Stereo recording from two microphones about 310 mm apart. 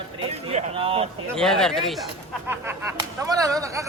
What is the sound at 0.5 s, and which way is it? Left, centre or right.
Speech, centre.